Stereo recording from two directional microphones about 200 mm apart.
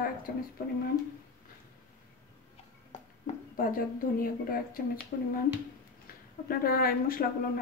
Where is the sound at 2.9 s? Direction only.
40° left (ahead or behind).